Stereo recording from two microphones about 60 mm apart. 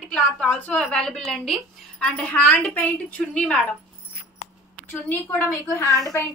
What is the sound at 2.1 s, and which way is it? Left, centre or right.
A woman's voice, left.